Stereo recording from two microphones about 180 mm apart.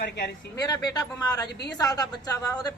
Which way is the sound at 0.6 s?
20° left (ahead or behind).